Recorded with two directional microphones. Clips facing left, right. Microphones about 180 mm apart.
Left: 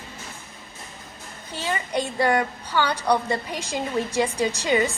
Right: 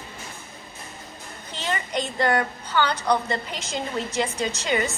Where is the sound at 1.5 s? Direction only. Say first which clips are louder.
Left 2 dB; 10° left (ahead or behind).